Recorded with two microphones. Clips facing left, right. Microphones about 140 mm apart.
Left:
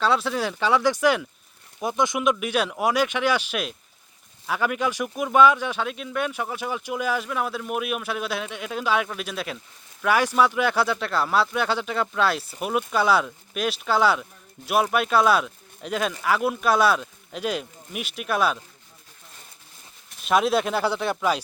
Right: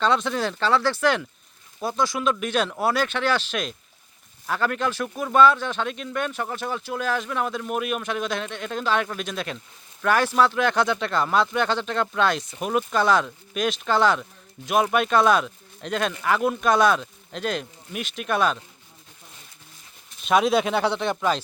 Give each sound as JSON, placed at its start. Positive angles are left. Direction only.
{"t": 0.0, "sound": "speech", "side_deg": 5}
{"t": 20.2, "sound": "speech", "side_deg": 0}